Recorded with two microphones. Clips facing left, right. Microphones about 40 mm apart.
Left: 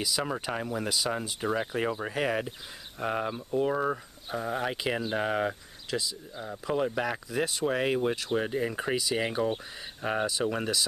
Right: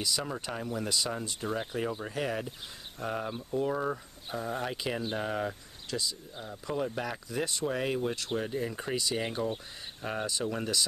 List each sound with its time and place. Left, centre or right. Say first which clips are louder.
0.2 s speech: left 4 dB; left
0.7 s speech: left 1 dB; centre